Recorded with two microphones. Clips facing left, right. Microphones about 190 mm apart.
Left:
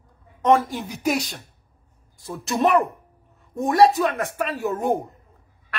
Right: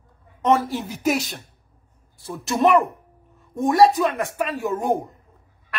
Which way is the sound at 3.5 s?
Centre (ahead or behind).